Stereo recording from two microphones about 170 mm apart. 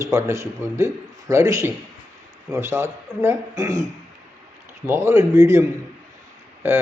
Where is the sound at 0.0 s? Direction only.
15° right (ahead or behind).